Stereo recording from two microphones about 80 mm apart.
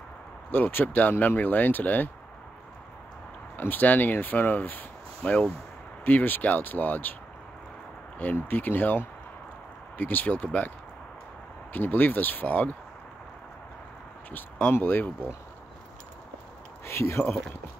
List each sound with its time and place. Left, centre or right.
0.5 s speech: left
3.5 s speech: left
8.2 s speech: left
11.7 s speech: left
14.3 s speech: left
16.8 s speech: left